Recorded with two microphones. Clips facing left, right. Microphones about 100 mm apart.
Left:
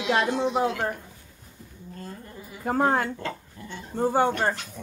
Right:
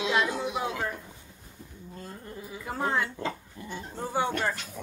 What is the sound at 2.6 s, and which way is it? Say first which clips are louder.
Music: left 6 dB; 50° left (ahead or behind).